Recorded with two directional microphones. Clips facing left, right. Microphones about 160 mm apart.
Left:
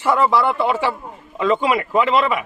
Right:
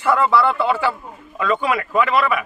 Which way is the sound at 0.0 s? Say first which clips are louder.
Even; 20° left (ahead or behind).